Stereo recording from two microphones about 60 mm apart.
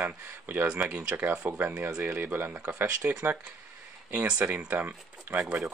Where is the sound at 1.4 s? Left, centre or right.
Right.